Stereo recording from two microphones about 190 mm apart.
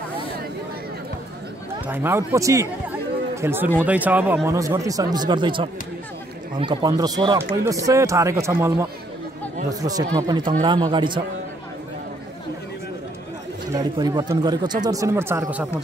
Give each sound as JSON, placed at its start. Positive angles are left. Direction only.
{"t": 1.9, "sound": "speech", "side_deg": -15}
{"t": 13.7, "sound": "speech", "side_deg": -20}